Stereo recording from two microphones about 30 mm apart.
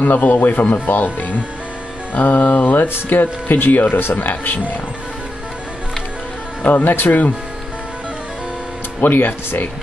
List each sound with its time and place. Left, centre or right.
0.0 s speech: left
2.1 s speech: left
6.6 s speech: left